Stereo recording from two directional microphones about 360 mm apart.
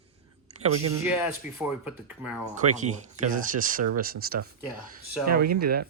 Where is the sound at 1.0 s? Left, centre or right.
Centre.